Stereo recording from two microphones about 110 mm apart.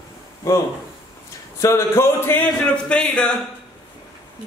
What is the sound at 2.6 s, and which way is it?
Speech, 10° left (ahead or behind).